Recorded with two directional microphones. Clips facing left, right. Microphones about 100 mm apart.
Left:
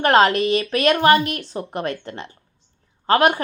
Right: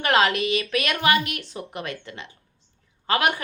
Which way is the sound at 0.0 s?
35° left (ahead or behind).